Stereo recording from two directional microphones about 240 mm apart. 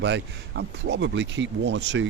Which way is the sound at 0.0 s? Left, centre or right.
Right.